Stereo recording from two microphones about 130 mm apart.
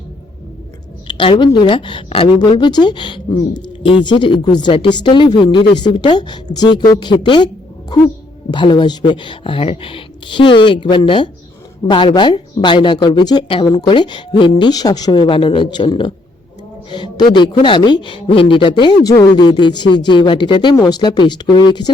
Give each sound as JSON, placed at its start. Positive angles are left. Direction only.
{"t": 1.0, "sound": "a woman's voice", "side_deg": 40}